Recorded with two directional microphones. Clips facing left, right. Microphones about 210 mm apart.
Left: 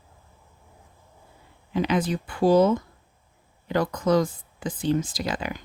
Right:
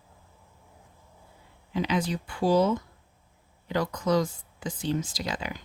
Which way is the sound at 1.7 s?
55° left (ahead or behind).